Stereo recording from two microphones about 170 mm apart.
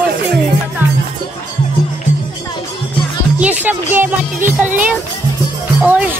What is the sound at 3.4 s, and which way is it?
A child's voice, 10° right (ahead or behind).